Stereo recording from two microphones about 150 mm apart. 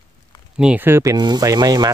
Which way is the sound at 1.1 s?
25° right (ahead or behind).